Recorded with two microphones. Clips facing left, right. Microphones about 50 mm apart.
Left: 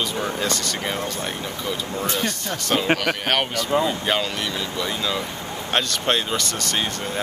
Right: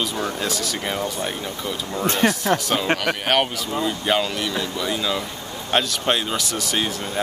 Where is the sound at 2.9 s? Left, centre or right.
Centre.